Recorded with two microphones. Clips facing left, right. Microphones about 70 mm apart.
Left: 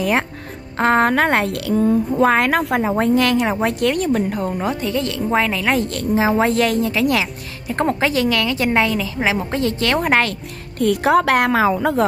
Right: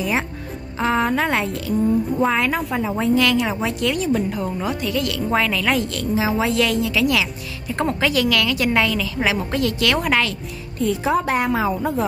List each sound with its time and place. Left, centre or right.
0.7 s a woman's voice: left
2.8 s a woman's voice: left
3.3 s a woman's voice: left
3.6 s a woman's voice: left
4.6 s a woman's voice: left
5.7 s speech: left
10.8 s a woman's voice: left